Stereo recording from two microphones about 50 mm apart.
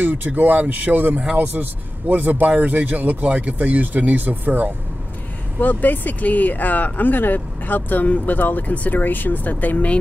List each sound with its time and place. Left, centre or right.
0.0 s a man's voice: right
5.6 s speech: left